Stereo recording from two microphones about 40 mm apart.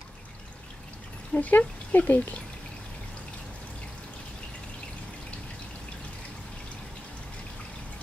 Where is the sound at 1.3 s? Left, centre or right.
Left.